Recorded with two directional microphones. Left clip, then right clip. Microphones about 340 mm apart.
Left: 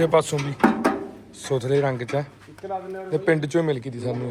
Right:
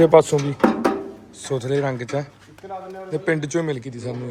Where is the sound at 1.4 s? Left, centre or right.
Centre.